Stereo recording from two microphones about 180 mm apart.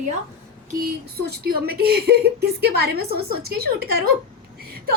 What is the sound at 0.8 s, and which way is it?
Speech, 60° right (ahead or behind).